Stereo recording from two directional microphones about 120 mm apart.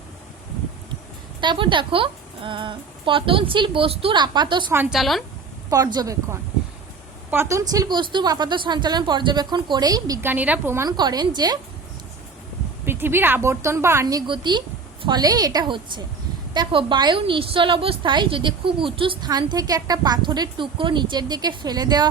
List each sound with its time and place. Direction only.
1.4 s a woman's voice: 40° right (ahead or behind)
4.9 s a woman's voice: centre (ahead or behind)
5.7 s speech: 30° right (ahead or behind)
10.2 s a woman's voice: 15° right (ahead or behind)
10.8 s speech: 35° right (ahead or behind)
12.8 s a woman's voice: 20° right (ahead or behind)
14.3 s a woman's voice: 40° right (ahead or behind)
19.3 s speech: 35° right (ahead or behind)